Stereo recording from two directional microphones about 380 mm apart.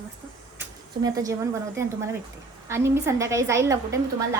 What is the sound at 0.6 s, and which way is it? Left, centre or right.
A woman's voice, centre.